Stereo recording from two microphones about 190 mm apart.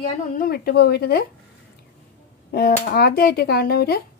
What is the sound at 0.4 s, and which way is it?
Speech, 55° left (ahead or behind).